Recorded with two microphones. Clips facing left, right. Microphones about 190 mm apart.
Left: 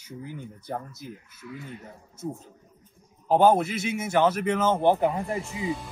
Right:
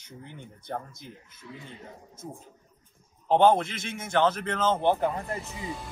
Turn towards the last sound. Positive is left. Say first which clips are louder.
# left 5 dB
turn(degrees=5)  # may be behind; listen again after turning